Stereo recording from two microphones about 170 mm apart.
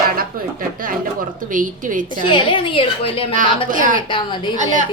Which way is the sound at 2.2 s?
30° left (ahead or behind).